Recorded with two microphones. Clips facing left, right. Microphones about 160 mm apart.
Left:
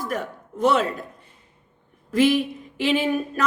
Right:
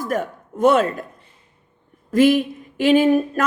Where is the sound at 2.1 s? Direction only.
50° right (ahead or behind).